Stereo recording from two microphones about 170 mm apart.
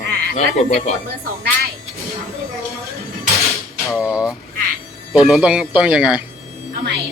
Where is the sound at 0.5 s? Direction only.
40° left (ahead or behind).